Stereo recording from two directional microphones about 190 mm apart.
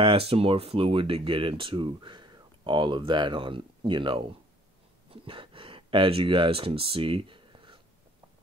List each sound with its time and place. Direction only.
0.0 s speech: 30° right (ahead or behind)